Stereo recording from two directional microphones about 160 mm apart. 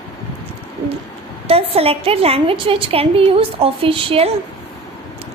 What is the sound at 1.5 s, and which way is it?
A woman's voice, 35° right (ahead or behind).